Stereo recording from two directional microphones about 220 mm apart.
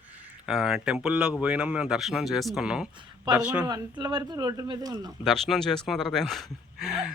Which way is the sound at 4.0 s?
20° right (ahead or behind).